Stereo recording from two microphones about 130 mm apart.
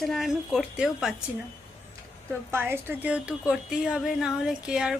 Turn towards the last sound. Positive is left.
turn(degrees=-5)  # may be behind; listen again after turning